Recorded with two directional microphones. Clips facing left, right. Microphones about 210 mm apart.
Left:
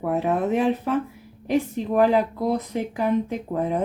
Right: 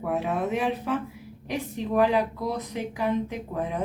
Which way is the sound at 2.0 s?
50° left (ahead or behind).